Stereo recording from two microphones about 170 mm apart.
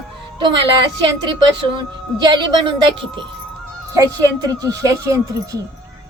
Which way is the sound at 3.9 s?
20° right (ahead or behind).